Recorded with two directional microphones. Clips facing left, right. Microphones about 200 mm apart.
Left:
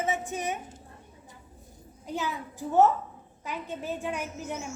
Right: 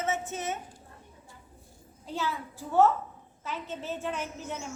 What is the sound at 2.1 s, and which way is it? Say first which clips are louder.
A woman's voice: left 1 dB; 15° left (ahead or behind).